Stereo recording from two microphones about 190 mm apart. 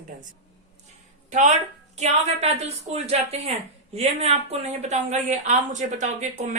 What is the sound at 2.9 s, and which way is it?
Speech, 35° right (ahead or behind).